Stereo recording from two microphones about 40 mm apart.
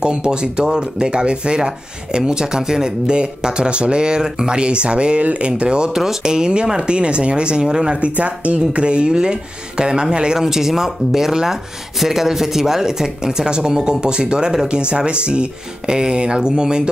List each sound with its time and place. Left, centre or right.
0.0 s speech: right
5.9 s speech: centre
8.0 s speech: right